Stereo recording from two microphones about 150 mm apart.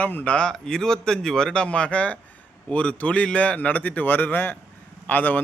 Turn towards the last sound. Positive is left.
turn(degrees=10)  # may be behind; listen again after turning